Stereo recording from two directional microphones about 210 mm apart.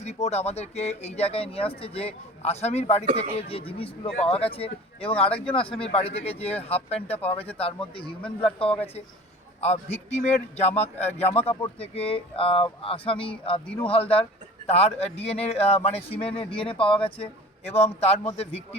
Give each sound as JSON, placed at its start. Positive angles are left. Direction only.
{"t": 0.0, "sound": "speech", "side_deg": 30}
{"t": 8.5, "sound": "speech", "side_deg": 25}